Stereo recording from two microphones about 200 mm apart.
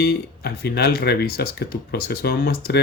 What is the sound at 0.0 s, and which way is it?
Speech, 50° left (ahead or behind).